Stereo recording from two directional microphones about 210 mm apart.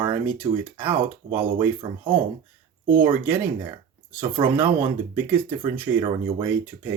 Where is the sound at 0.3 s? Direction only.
10° right (ahead or behind).